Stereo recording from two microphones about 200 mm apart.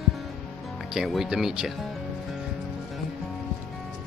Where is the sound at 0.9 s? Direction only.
Centre (ahead or behind).